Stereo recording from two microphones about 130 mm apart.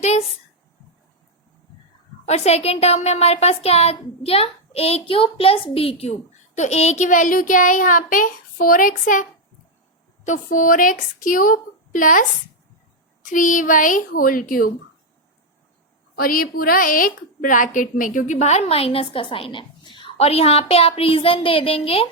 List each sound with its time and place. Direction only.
0.0 s a woman's voice: 55° left (ahead or behind)
2.2 s a woman's voice: 55° left (ahead or behind); by 9.2 s 90° left
10.2 s a woman's voice: 85° left
13.2 s a woman's voice: 85° left
16.3 s a woman's voice: 90° left; by 22.1 s 50° left (ahead or behind)